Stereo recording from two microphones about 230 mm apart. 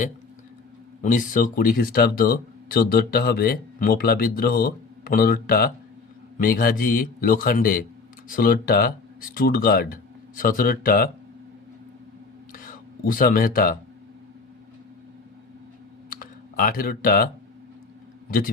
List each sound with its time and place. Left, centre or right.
1.0 s speech: left
12.5 s a sound: left
16.0 s computer keyboard: left
18.3 s a man's voice: left